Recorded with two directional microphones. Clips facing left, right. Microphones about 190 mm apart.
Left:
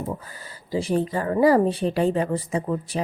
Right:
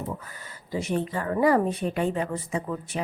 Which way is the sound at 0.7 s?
30° left (ahead or behind).